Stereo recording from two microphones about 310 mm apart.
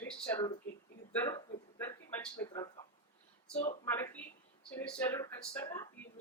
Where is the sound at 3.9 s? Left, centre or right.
Centre.